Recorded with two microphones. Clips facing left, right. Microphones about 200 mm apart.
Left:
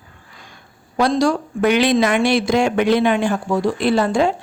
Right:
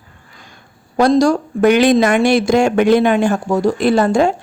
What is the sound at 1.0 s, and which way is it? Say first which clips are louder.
Speech: right 5 dB; 45° right (ahead or behind).